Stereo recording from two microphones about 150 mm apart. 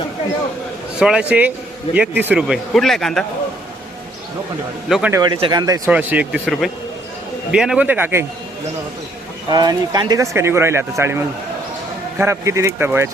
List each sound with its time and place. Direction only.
0.9 s speech: 5° right (ahead or behind)
4.9 s a man's voice: centre (ahead or behind)
5.1 s speech: 30° right (ahead or behind)
5.9 s speech: 10° right (ahead or behind)
7.5 s speech: 5° right (ahead or behind)
9.5 s speech: 25° right (ahead or behind)